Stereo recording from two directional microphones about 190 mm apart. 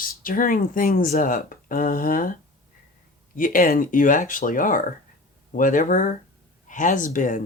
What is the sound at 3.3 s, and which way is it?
Speech, 45° left (ahead or behind).